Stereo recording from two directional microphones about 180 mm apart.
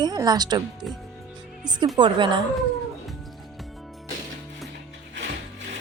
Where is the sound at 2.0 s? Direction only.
25° right (ahead or behind).